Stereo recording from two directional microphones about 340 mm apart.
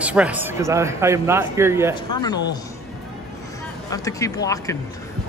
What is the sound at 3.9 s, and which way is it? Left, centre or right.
Speech, centre.